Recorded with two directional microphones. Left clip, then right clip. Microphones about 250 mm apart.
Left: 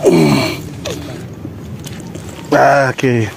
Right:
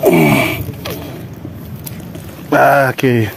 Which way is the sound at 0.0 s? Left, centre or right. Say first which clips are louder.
Even; centre.